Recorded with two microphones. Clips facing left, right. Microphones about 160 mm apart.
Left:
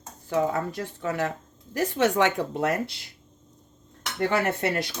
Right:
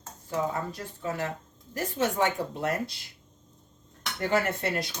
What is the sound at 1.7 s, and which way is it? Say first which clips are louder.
A woman's voice: left 5 dB; 85° left.